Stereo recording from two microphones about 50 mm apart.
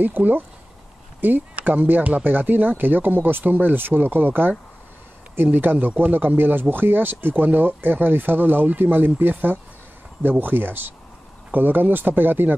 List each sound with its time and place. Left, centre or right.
0.0 s speech: right